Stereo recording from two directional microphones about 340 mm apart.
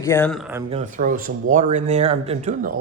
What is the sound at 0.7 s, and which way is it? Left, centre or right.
Speech, right.